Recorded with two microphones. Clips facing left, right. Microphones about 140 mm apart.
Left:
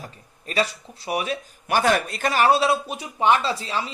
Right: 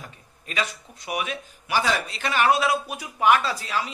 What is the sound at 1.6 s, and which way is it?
Speech, 50° left (ahead or behind).